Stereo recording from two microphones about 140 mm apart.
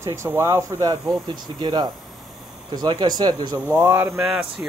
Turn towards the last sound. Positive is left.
turn(degrees=-5)  # may be behind; listen again after turning